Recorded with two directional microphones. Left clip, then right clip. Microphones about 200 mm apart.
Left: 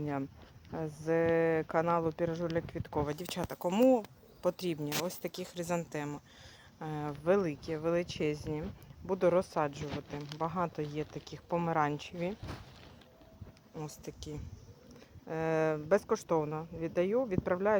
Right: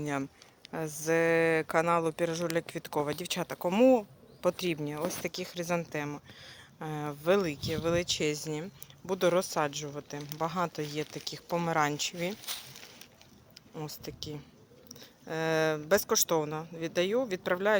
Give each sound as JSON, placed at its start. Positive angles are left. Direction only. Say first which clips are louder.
{"t": 0.0, "sound": "speech", "louder": "right 3 dB", "side_deg": -10}
{"t": 13.7, "sound": "speech", "louder": "right 4 dB", "side_deg": 0}